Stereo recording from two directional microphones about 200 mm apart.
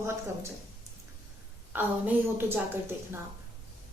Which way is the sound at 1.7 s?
10° right (ahead or behind).